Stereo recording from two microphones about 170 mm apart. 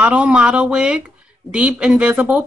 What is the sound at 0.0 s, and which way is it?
Speech, 5° right (ahead or behind).